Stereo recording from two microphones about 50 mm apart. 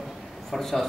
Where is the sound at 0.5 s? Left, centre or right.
Centre.